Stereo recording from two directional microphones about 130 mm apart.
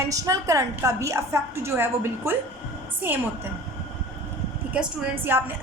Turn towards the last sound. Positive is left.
turn(degrees=-15)  # may be behind; listen again after turning